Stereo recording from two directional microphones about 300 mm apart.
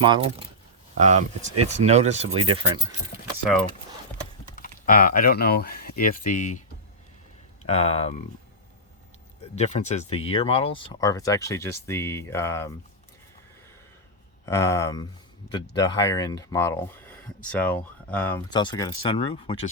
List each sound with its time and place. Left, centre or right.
0.0 s speech: centre
4.5 s speech: left
7.6 s speech: left
9.4 s speech: left
14.4 s speech: centre